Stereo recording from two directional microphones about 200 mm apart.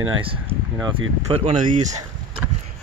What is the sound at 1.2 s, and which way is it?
Speech, 25° right (ahead or behind).